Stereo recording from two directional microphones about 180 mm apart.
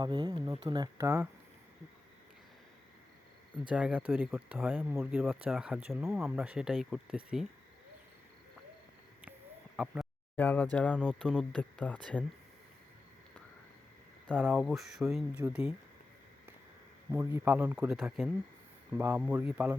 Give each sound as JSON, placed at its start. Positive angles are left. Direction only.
{"t": 0.0, "sound": "speech", "side_deg": -25}
{"t": 3.7, "sound": "speech", "side_deg": -5}
{"t": 9.7, "sound": "speech", "side_deg": -5}
{"t": 10.3, "sound": "speech", "side_deg": 10}
{"t": 14.3, "sound": "speech", "side_deg": -5}
{"t": 17.1, "sound": "speech", "side_deg": -10}